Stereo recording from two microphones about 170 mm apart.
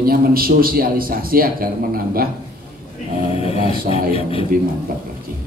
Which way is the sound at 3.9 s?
35° left (ahead or behind).